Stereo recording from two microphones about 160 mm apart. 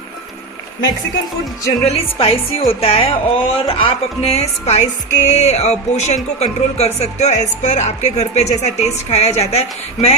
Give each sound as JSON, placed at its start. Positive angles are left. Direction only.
{"t": 1.8, "sound": "speech", "side_deg": 40}